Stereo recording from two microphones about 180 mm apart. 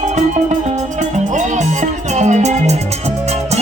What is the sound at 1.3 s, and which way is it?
Music, 40° right (ahead or behind).